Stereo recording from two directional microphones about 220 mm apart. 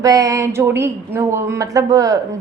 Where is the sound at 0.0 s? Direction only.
15° right (ahead or behind).